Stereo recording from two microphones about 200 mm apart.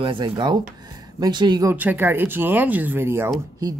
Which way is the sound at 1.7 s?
10° right (ahead or behind).